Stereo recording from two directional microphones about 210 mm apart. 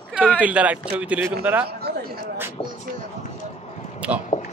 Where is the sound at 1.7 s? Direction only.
50° right (ahead or behind).